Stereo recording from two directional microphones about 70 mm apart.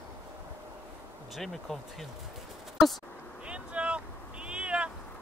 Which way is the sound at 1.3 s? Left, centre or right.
Centre.